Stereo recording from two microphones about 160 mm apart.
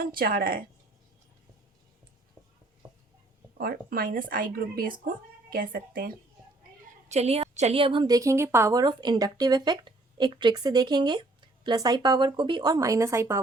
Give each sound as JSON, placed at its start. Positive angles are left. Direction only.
{"t": 0.0, "sound": "speech", "side_deg": -65}
{"t": 3.6, "sound": "speech", "side_deg": -65}
{"t": 7.1, "sound": "a woman's voice", "side_deg": -40}